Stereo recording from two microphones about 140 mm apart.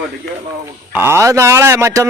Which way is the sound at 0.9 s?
15° right (ahead or behind).